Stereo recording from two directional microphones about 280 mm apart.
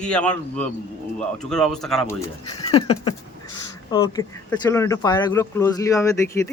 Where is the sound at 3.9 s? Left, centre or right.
Centre.